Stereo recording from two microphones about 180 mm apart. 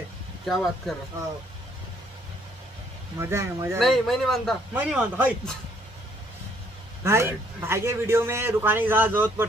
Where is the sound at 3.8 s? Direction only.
Centre (ahead or behind).